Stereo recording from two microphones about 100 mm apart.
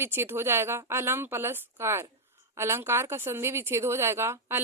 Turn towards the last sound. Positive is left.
turn(degrees=-25)  # may be behind; listen again after turning